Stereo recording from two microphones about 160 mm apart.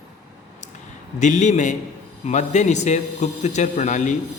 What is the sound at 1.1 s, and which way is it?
A man's voice, 50° left (ahead or behind).